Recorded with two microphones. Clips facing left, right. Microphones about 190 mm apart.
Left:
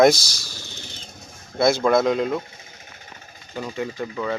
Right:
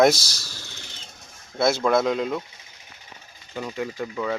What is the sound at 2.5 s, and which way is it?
Engine, 50° left (ahead or behind).